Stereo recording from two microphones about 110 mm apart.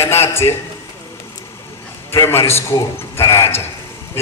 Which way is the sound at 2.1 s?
25° left (ahead or behind).